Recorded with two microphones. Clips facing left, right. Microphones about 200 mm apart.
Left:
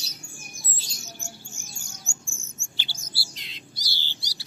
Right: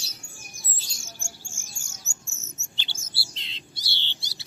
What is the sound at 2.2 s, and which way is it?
Bird, 20° right (ahead or behind).